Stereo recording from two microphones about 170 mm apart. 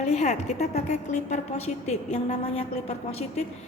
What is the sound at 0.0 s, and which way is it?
A woman's voice, 40° left (ahead or behind).